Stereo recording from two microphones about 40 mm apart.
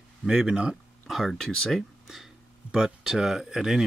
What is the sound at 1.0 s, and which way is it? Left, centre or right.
Speech, centre.